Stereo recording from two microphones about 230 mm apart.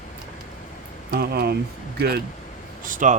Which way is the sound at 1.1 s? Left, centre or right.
Right.